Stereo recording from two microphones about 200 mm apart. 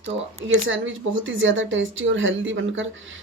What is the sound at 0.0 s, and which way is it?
Speech, 75° right (ahead or behind).